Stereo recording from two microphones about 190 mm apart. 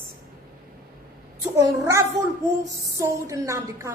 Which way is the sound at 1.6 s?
15° right (ahead or behind).